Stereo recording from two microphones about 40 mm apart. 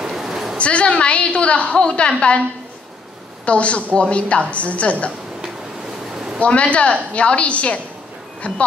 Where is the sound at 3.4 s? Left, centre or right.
Left.